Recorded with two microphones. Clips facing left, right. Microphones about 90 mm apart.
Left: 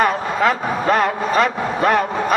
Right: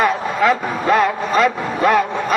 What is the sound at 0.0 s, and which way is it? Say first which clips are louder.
Speech: right 1 dB; 40° left (ahead or behind).